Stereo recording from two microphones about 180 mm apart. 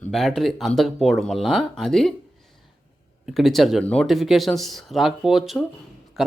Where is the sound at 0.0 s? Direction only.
Centre (ahead or behind).